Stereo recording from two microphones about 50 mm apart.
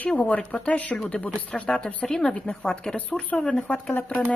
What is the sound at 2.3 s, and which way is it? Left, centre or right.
Speech, left.